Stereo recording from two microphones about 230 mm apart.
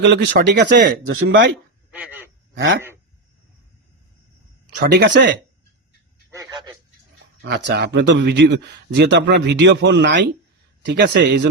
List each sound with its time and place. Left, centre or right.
0.0 s a man's voice: right
1.9 s a sound: centre
2.6 s a man's voice: right
4.7 s a man's voice: right
6.3 s a sound: centre
7.4 s a man's voice: right